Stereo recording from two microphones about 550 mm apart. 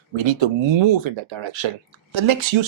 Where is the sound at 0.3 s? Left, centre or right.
Right.